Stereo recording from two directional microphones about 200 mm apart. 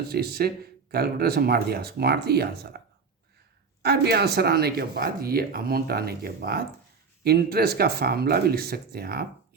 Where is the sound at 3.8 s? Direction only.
55° right (ahead or behind).